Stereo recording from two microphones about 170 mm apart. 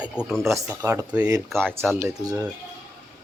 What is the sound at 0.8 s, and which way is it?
Speech, 15° right (ahead or behind).